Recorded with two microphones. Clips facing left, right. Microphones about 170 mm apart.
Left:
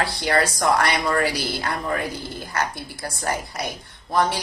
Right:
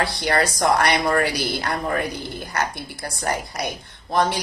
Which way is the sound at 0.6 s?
20° right (ahead or behind).